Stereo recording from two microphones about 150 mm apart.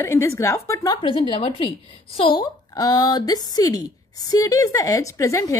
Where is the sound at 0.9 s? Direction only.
35° left (ahead or behind).